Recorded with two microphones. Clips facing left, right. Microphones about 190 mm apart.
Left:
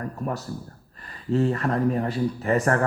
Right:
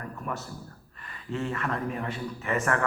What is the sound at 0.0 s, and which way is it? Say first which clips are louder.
A man's voice: left 6 dB; 35° left (ahead or behind).